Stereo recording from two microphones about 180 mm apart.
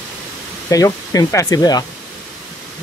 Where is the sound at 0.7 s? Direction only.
20° left (ahead or behind).